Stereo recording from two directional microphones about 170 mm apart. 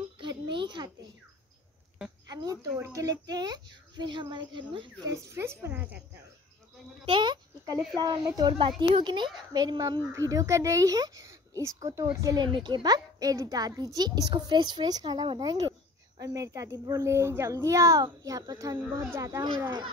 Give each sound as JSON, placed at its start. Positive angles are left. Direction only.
{"t": 0.2, "sound": "a sound", "side_deg": -30}
{"t": 2.2, "sound": "a child's voice", "side_deg": -20}
{"t": 7.1, "sound": "a child's voice", "side_deg": -25}